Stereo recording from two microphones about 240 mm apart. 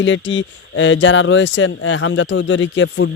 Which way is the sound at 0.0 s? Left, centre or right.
Left.